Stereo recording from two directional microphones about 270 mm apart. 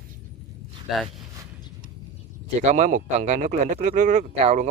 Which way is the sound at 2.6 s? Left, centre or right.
Right.